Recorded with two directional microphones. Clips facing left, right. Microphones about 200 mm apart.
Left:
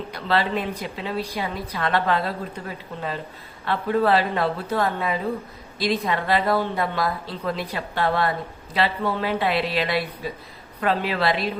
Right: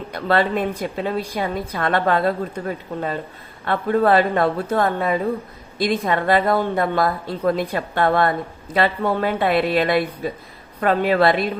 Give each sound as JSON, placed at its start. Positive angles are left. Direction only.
{"t": 0.1, "sound": "a woman's voice", "side_deg": -50}